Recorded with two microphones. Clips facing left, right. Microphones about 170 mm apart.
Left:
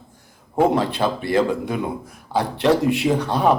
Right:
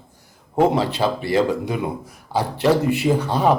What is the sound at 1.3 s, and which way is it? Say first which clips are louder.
Speech: left 1 dB; centre (ahead or behind).